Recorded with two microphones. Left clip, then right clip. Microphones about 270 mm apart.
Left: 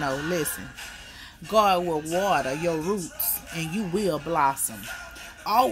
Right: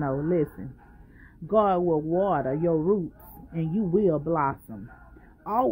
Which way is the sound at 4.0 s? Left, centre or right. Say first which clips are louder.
Left 2 dB; left.